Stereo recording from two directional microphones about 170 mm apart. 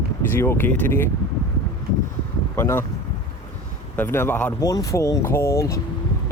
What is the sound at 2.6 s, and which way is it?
Speech, 15° left (ahead or behind).